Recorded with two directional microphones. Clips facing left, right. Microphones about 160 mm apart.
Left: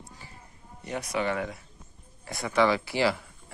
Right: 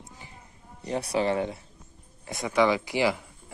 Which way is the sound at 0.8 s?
30° right (ahead or behind).